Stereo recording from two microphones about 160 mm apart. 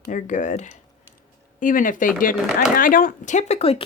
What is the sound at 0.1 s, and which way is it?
Speech, 50° left (ahead or behind).